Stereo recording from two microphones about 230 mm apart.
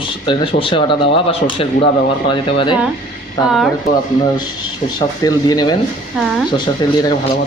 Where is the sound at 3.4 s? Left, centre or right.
Centre.